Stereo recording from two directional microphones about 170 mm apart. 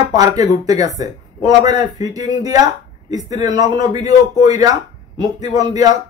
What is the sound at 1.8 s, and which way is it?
A man's voice, 20° right (ahead or behind).